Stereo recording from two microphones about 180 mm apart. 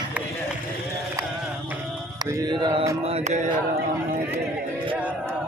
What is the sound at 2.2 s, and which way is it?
Mantra, 20° right (ahead or behind).